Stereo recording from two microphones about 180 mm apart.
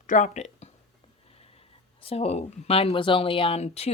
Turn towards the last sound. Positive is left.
turn(degrees=35)  # may be behind; listen again after turning